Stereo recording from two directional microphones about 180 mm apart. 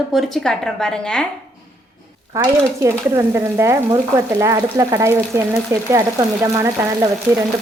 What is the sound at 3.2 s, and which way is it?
Speech, 15° right (ahead or behind).